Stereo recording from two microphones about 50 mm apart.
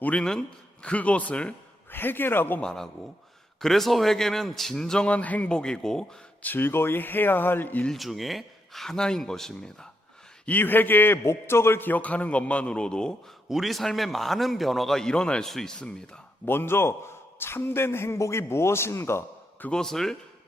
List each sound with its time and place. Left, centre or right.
0.2 s a man's voice: centre
1.9 s speech: left
2.6 s a man's voice: centre
5.0 s a man's voice: left
5.5 s speech: centre
6.4 s speech: left
7.9 s speech: centre
10.4 s speech: left
11.2 s a man's voice: left
11.8 s a man's voice: left; by 13.1 s centre
13.5 s a man's voice: centre
16.5 s a man's voice: left
19.7 s speech: centre